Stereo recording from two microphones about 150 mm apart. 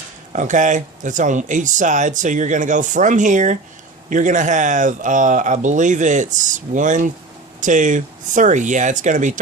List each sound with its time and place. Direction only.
0.3 s speech: 55° right (ahead or behind)